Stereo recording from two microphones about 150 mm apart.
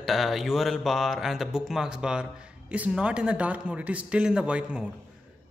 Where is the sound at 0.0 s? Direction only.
Centre (ahead or behind).